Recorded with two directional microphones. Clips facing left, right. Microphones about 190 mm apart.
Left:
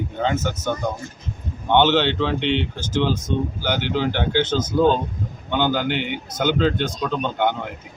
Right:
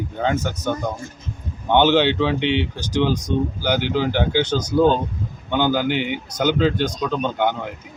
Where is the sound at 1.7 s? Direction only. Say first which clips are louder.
Right 1 dB; 10° right (ahead or behind).